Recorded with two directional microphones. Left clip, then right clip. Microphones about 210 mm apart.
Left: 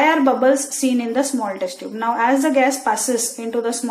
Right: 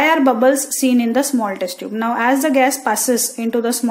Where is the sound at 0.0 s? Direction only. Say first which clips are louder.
Right 2 dB; 50° right (ahead or behind).